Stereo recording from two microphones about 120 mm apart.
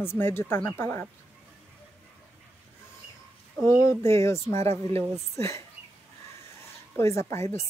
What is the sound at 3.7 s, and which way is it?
A woman's voice, 25° left (ahead or behind).